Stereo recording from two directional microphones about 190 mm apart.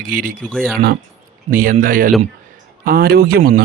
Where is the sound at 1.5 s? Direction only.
50° right (ahead or behind).